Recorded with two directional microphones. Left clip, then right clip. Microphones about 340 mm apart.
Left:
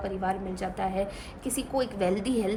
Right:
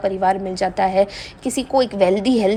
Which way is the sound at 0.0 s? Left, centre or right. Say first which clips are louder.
Right 12 dB; centre.